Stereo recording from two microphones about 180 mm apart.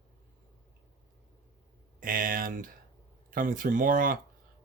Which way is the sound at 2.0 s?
50° right (ahead or behind).